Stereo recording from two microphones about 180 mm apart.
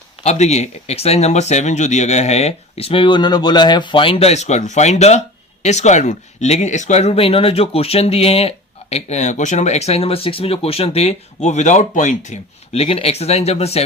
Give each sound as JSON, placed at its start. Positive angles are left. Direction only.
{"t": 0.2, "sound": "speech", "side_deg": 40}